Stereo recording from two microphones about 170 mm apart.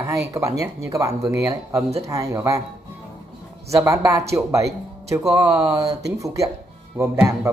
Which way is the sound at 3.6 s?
20° right (ahead or behind).